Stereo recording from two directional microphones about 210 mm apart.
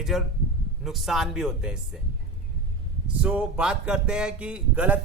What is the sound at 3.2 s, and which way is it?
Speech, 5° right (ahead or behind).